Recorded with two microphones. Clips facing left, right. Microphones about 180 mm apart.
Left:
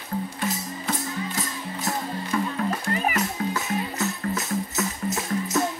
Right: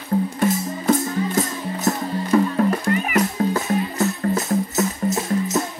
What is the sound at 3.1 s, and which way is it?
Music, 35° right (ahead or behind).